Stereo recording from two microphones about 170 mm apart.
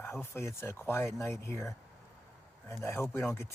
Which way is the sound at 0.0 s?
15° left (ahead or behind).